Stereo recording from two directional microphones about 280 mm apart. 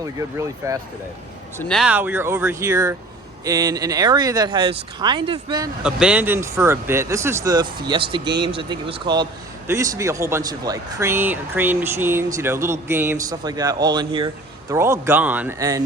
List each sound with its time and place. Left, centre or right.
0.0 s speech: centre
1.5 s speech: centre
5.8 s speech: centre